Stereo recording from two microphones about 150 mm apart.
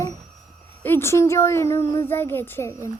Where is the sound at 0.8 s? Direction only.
15° left (ahead or behind).